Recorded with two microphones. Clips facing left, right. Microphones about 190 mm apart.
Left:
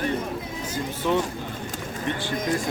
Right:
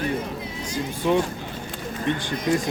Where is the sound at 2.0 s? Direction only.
15° right (ahead or behind).